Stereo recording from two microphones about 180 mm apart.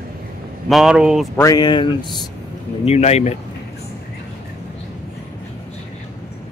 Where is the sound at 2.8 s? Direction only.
35° left (ahead or behind).